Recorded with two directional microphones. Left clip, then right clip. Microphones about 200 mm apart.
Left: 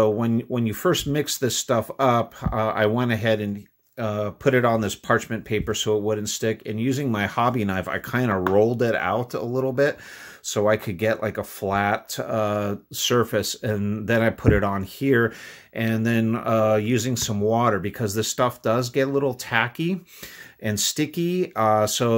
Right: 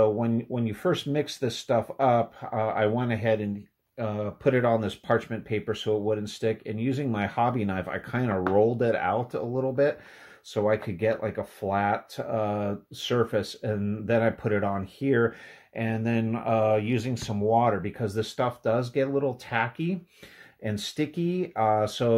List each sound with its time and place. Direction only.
0.0 s speech: 30° left (ahead or behind)